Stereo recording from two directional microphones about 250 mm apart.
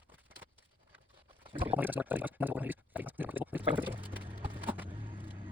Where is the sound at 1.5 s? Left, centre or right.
Centre.